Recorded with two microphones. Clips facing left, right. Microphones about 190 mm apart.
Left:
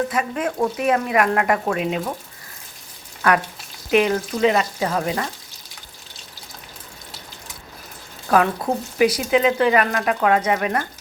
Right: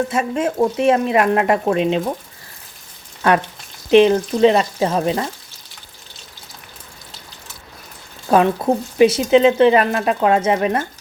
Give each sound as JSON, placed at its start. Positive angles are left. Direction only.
{"t": 0.1, "sound": "speech", "side_deg": -25}
{"t": 3.9, "sound": "speech", "side_deg": -30}
{"t": 8.3, "sound": "speech", "side_deg": -25}